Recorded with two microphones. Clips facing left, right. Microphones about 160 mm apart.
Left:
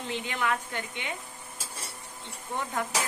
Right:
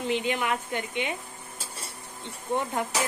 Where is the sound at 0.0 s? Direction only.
15° right (ahead or behind).